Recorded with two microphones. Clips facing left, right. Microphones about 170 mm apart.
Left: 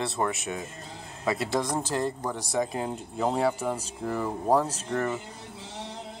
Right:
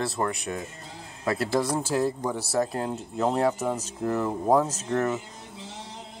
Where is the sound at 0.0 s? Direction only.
Centre (ahead or behind).